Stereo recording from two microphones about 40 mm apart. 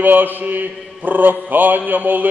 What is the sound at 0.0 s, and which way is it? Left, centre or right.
Mantra, right.